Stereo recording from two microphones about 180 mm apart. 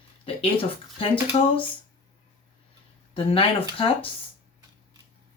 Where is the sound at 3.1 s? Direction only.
30° left (ahead or behind).